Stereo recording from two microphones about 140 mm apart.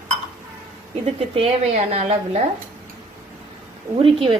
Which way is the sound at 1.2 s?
45° right (ahead or behind).